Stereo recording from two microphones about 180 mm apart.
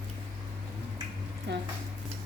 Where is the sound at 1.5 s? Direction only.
70° right (ahead or behind).